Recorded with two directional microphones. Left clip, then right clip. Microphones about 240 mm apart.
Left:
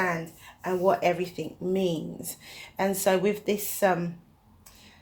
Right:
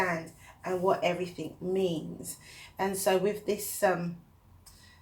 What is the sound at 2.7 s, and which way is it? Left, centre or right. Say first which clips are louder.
Speech: left 3 dB; left.